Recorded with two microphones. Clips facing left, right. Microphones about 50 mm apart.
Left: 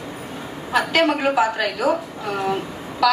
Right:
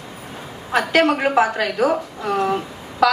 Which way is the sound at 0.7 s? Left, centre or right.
Right.